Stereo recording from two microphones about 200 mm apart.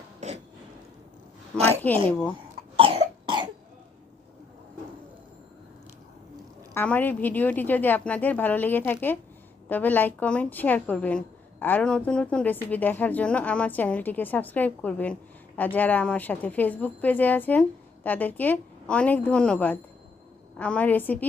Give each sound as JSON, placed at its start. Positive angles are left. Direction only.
{"t": 0.2, "sound": "a sound", "side_deg": -35}
{"t": 1.5, "sound": "a woman's voice", "side_deg": -30}
{"t": 2.7, "sound": "cough", "side_deg": -25}
{"t": 6.7, "sound": "speech", "side_deg": 10}